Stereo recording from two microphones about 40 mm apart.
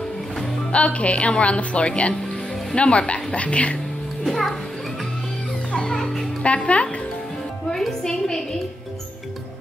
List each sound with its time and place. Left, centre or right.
0.7 s speech: left
4.3 s a child's voice: centre
5.7 s music: left
6.4 s speech: left
8.0 s a woman's voice: centre